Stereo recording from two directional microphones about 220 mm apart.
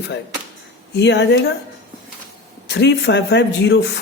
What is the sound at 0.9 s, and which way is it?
Speech, 50° left (ahead or behind).